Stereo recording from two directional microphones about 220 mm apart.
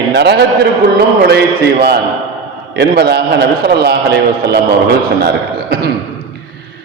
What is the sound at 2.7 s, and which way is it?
A man's voice, 45° right (ahead or behind).